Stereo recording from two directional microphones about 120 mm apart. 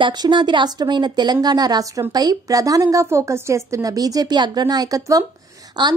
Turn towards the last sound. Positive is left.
turn(degrees=-35)  # may be behind; listen again after turning